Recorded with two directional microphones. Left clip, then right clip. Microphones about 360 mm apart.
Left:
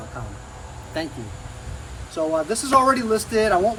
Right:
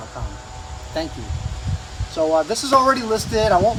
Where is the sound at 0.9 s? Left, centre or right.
Centre.